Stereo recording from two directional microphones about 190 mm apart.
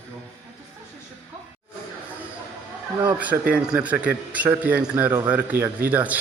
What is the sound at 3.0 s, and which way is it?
A man's voice, 10° right (ahead or behind).